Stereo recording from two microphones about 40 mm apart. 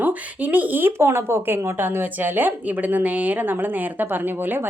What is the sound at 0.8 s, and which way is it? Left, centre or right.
Speech, right.